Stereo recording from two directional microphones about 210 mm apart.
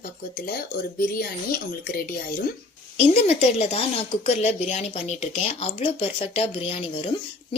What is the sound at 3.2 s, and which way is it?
Speech, 30° left (ahead or behind).